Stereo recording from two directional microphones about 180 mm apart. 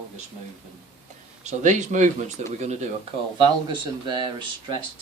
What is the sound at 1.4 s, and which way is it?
Speech, 40° right (ahead or behind).